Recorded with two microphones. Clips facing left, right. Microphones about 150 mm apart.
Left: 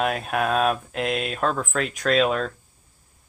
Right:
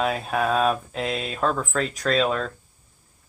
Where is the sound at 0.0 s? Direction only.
Centre (ahead or behind).